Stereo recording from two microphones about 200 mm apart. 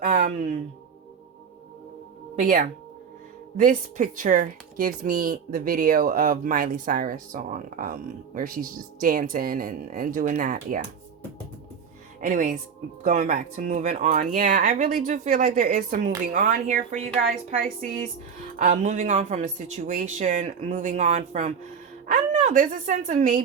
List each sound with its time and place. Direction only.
0.0 s a sound: 40° right (ahead or behind)
2.3 s speech: 40° right (ahead or behind)
12.2 s speech: 40° right (ahead or behind)